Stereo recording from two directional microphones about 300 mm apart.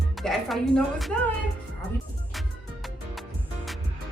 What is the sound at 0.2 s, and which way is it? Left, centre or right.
Speech, centre.